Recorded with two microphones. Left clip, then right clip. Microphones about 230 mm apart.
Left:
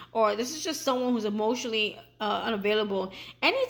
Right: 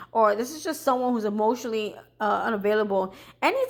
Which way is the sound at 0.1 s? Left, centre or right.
Right.